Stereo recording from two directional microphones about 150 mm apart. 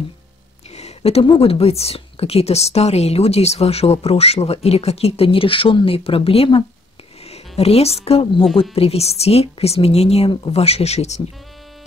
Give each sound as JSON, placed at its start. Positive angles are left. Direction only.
{"t": 0.7, "sound": "speech", "side_deg": 45}